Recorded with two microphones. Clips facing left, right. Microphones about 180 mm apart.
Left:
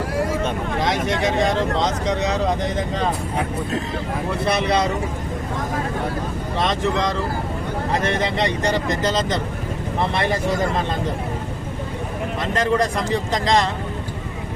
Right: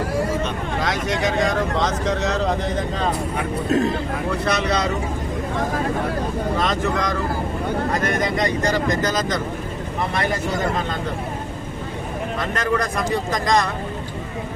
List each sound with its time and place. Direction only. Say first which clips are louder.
0.8 s speech: left 1 dB; 25° left (ahead or behind)
4.4 s speech: left 3 dB; 25° left (ahead or behind)
6.6 s speech: left 4 dB; 25° left (ahead or behind)
12.5 s speech: left 3 dB; 25° left (ahead or behind)